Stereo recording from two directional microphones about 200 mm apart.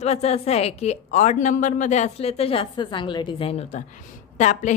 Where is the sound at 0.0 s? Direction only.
30° left (ahead or behind).